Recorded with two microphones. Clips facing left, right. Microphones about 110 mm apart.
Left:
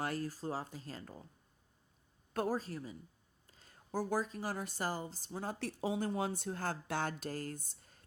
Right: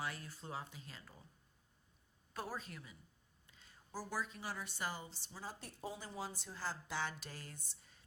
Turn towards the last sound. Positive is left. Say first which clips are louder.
# left 12 dB
turn(degrees=45)  # may be behind; listen again after turning